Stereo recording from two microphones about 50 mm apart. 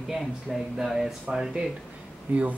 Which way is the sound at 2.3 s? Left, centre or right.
Right.